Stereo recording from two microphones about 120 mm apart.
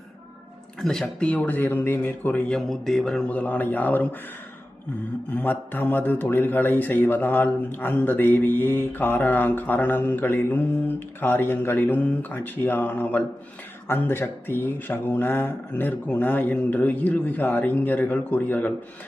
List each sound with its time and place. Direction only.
0.8 s a man's voice: 5° left (ahead or behind)
2.6 s a man's voice: centre (ahead or behind)
5.3 s a man's voice: 15° left (ahead or behind)